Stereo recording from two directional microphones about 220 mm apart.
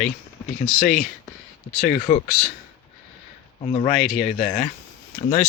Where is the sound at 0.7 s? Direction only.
40° left (ahead or behind).